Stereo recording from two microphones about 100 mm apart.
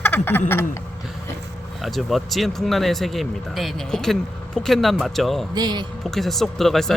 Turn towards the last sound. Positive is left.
turn(degrees=5)  # may be behind; listen again after turning